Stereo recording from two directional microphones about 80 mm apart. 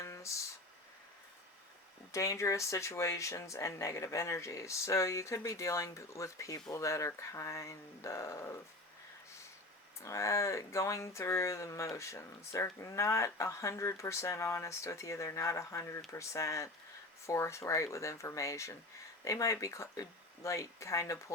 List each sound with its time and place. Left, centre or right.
0.0 s a sound: left
2.1 s speech: left
10.0 s speech: left